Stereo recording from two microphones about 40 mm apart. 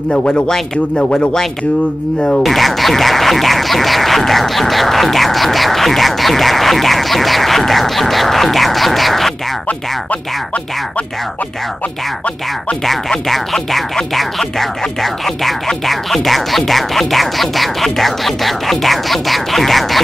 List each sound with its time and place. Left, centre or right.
0.1 s speech: centre
2.4 s speech: centre
13.3 s speech: centre